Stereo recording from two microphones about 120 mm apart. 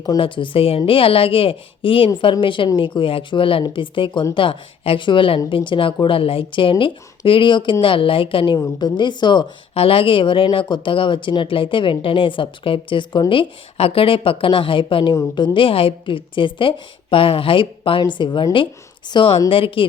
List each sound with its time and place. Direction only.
0.2 s a woman's voice: 45° left (ahead or behind)
9.7 s speech: 50° left (ahead or behind)